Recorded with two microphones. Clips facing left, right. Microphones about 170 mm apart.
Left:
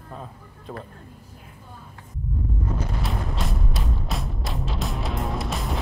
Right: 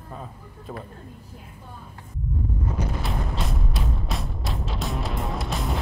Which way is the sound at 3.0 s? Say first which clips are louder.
Even; centre (ahead or behind).